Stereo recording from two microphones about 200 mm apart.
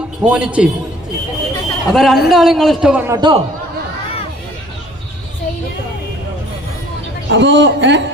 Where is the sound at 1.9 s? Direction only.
Centre (ahead or behind).